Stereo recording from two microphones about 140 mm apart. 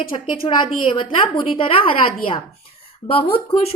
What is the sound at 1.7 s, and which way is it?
Speech, 40° left (ahead or behind).